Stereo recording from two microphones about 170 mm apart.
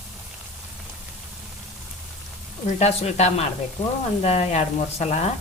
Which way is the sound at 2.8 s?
40° left (ahead or behind).